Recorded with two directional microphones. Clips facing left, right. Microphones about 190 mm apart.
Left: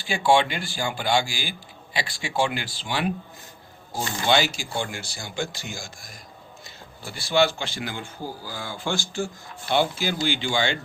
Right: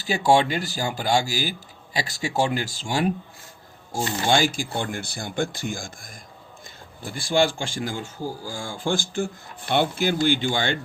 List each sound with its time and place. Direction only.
0.0 s speech: 40° right (ahead or behind)
4.3 s speech: 50° right (ahead or behind)